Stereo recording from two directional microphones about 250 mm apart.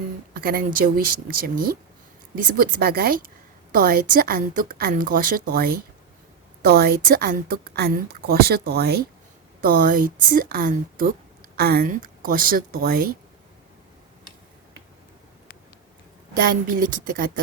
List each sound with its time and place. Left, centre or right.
0.3 s a woman's voice: right
16.4 s a woman's voice: right